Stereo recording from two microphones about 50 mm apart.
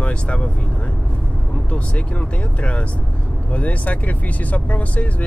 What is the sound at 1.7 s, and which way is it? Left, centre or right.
Speech, left.